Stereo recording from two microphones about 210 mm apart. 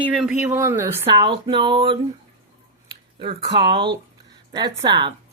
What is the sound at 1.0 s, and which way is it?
Speech, 25° right (ahead or behind).